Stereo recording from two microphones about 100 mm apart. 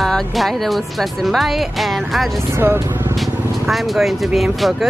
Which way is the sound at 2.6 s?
25° right (ahead or behind).